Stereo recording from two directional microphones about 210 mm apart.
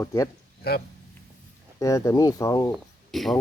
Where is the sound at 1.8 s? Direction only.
15° left (ahead or behind).